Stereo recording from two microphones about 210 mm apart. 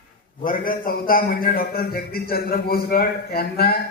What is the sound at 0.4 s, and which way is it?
A man's voice, 40° left (ahead or behind).